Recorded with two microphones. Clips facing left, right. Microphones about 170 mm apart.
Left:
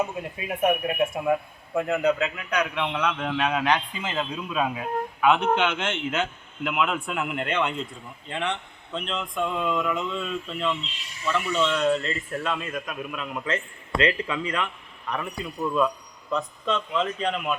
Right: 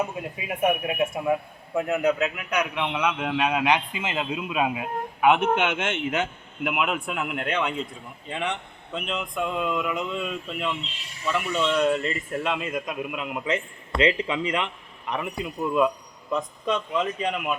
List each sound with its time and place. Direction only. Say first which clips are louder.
0.4 s a man's voice: left 1 dB; 5° right (ahead or behind)